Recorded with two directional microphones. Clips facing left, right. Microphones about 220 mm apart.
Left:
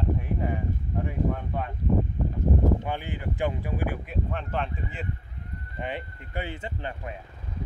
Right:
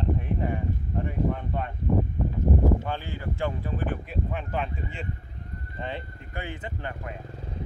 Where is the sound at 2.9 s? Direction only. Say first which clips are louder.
Left 1 dB; 15° left (ahead or behind).